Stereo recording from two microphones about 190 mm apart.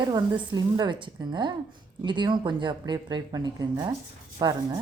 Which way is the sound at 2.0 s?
25° right (ahead or behind).